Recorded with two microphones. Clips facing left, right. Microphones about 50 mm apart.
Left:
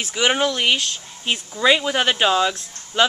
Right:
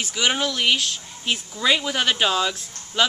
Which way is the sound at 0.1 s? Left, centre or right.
Centre.